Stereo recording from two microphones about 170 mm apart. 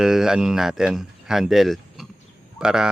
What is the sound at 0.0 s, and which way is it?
Speech, 5° right (ahead or behind).